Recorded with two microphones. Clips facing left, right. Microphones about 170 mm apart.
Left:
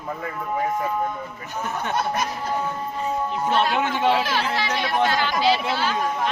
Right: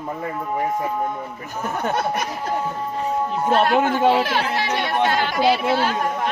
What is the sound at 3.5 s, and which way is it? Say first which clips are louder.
Speech: right 5 dB; 45° right (ahead or behind).